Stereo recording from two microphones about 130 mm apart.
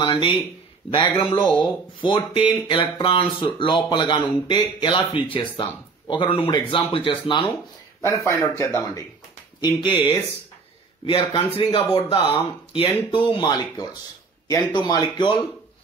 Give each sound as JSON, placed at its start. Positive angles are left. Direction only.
{"t": 0.0, "sound": "speech", "side_deg": 40}
{"t": 8.0, "sound": "speech", "side_deg": 20}